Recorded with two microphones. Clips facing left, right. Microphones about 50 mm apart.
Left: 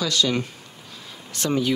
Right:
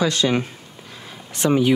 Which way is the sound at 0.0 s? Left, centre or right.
Right.